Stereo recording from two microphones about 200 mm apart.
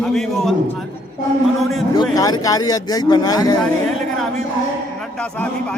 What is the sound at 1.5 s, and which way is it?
Speech, centre (ahead or behind).